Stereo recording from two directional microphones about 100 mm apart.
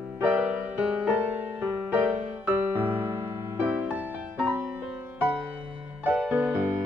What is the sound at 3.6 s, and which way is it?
Music, 15° right (ahead or behind).